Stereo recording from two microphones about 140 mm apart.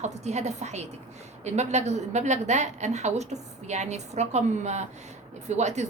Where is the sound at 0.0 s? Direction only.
55° right (ahead or behind).